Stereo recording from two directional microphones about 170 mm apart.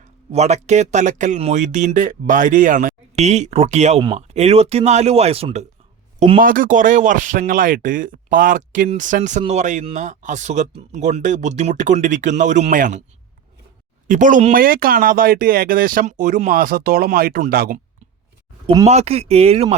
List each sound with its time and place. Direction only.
0.3 s speech: 40° right (ahead or behind)
6.4 s speech: 55° right (ahead or behind)
14.1 s speech: 50° right (ahead or behind)
18.6 s speech: 30° right (ahead or behind)
18.9 s speech: 40° right (ahead or behind)